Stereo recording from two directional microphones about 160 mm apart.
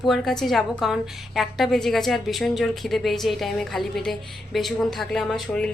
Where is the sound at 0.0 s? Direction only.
Centre (ahead or behind).